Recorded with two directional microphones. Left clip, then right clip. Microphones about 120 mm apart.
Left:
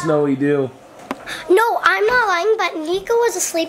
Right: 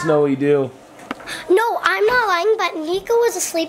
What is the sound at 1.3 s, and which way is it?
A child's voice, 5° left (ahead or behind).